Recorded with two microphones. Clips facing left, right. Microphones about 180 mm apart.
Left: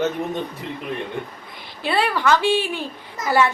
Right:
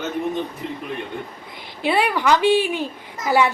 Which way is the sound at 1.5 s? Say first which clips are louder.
Right 2 dB; 20° right (ahead or behind).